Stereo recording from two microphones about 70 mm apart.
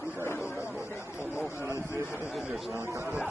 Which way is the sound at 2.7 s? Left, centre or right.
Right.